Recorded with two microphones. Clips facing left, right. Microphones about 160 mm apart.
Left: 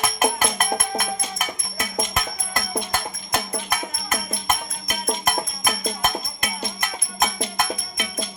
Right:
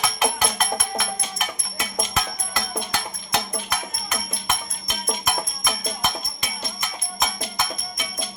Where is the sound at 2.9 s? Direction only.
50° left (ahead or behind).